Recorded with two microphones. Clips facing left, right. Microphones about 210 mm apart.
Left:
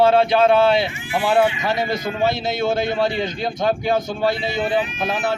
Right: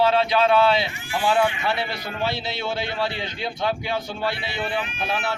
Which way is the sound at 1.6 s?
40° left (ahead or behind).